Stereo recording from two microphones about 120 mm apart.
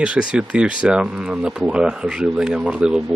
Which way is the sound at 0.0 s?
10° right (ahead or behind).